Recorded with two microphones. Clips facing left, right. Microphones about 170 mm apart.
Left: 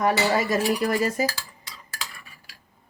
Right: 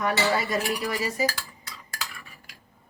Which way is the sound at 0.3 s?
50° left (ahead or behind).